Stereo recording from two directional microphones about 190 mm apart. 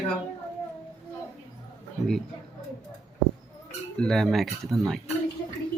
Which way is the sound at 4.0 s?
Centre (ahead or behind).